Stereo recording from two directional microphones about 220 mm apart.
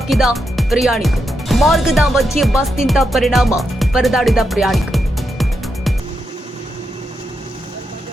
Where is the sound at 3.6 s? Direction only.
Centre (ahead or behind).